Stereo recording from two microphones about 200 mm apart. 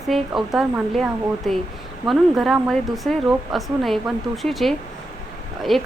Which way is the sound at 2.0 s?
Centre (ahead or behind).